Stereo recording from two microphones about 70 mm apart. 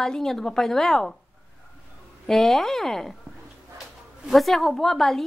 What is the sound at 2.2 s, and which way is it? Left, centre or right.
Speech, centre.